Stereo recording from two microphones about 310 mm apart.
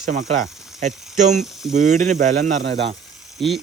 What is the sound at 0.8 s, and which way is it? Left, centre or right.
Speech, right.